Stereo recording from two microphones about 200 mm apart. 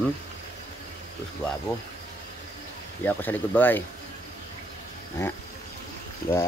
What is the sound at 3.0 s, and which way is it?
Speech, 10° left (ahead or behind).